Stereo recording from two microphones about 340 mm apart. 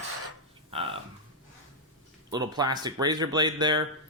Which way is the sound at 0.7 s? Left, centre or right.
Centre.